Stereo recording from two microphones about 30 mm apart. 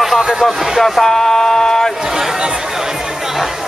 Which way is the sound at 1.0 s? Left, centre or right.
Centre.